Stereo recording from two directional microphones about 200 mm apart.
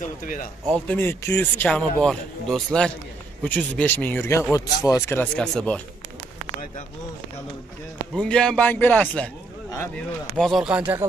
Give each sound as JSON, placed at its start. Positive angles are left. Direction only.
{"t": 0.0, "sound": "speech", "side_deg": 40}
{"t": 0.7, "sound": "a man's voice", "side_deg": 5}
{"t": 8.2, "sound": "speech", "side_deg": 5}
{"t": 10.3, "sound": "a man's voice", "side_deg": 0}